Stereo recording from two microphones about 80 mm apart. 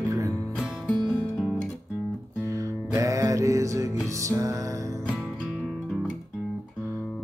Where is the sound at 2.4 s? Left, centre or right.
Right.